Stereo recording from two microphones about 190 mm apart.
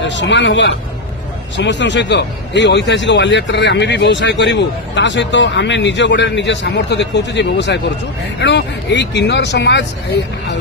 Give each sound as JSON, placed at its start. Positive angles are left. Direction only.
{"t": 0.1, "sound": "a man's voice", "side_deg": 70}